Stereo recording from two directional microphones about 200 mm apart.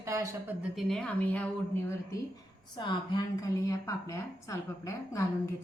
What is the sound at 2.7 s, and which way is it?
A woman's voice, 20° left (ahead or behind).